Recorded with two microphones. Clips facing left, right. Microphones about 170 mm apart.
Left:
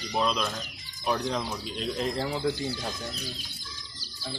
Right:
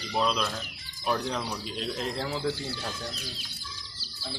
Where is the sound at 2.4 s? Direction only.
15° left (ahead or behind).